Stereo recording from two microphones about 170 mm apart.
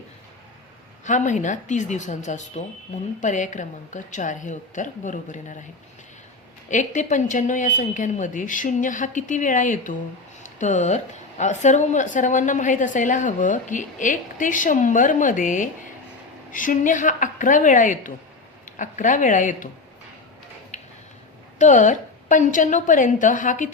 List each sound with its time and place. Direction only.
1.0 s a woman's voice: 45° left (ahead or behind)
6.7 s a woman's voice: 45° left (ahead or behind)
21.6 s a woman's voice: 45° left (ahead or behind)